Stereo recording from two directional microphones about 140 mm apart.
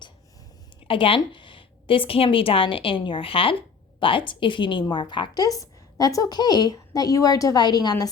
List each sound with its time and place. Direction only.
0.9 s a woman's voice: 40° left (ahead or behind)